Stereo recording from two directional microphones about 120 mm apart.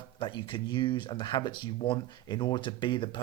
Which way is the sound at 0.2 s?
45° left (ahead or behind).